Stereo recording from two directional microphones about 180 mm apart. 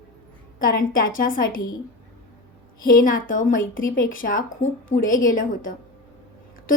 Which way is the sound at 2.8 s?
50° left (ahead or behind).